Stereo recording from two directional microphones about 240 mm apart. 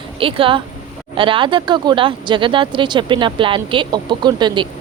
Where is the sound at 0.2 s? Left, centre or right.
Right.